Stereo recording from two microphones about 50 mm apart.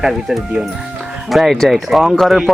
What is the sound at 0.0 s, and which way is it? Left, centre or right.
Speech, centre.